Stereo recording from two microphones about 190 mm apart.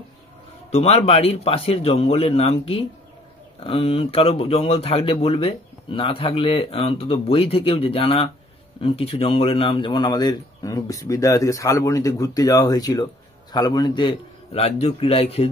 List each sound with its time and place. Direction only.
0.7 s a man's voice: 35° left (ahead or behind)